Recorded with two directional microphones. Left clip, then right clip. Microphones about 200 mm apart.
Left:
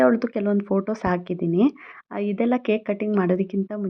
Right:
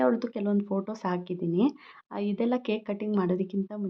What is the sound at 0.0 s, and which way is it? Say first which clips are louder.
Speech: left 7 dB; 20° left (ahead or behind).